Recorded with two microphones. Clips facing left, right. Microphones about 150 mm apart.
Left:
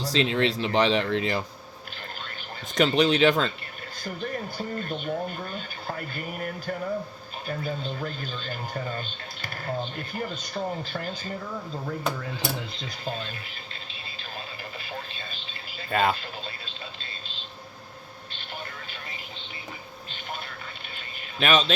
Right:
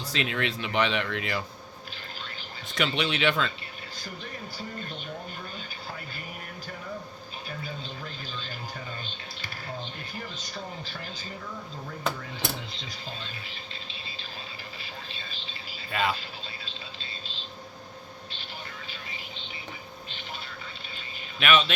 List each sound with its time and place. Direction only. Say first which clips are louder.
0.0 s speech: left 6 dB; 30° left (ahead or behind)
2.7 s speech: left 7 dB; 40° left (ahead or behind)
4.0 s speech: left 9 dB; 50° left (ahead or behind)
6.1 s speech: left 8 dB; 55° left (ahead or behind)
10.2 s speech: left 8 dB; 50° left (ahead or behind)
15.9 s speech: left 5 dB; 45° left (ahead or behind)
21.3 s speech: left 1 dB; 35° left (ahead or behind)